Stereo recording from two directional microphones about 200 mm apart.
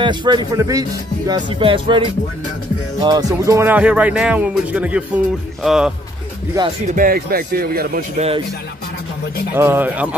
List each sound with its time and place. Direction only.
0.0 s speech: 25° right (ahead or behind); by 5.9 s centre (ahead or behind)
6.9 s speech: 45° right (ahead or behind)
9.6 s speech: 10° right (ahead or behind)